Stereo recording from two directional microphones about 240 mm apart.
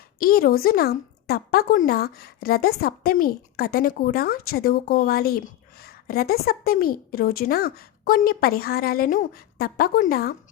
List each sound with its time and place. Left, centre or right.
0.2 s a woman's voice: left